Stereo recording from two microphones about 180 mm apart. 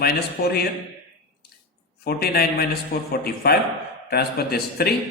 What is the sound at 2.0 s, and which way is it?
A man's voice, 60° left (ahead or behind).